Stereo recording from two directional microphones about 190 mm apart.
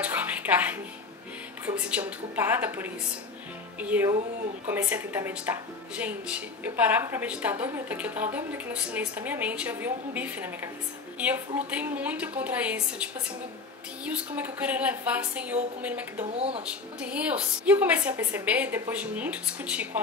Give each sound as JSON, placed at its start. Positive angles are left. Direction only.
{"t": 0.0, "sound": "music", "side_deg": -10}
{"t": 1.9, "sound": "speech", "side_deg": -5}
{"t": 16.3, "sound": "speech", "side_deg": -30}
{"t": 17.0, "sound": "speech", "side_deg": -5}